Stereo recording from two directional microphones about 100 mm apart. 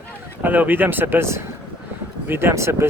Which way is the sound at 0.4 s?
15° right (ahead or behind).